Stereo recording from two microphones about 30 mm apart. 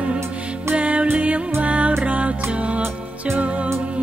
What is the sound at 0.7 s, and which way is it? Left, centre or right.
Music, right.